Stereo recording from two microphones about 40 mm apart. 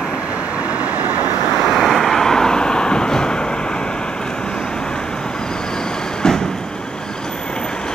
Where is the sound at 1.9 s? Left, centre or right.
Centre.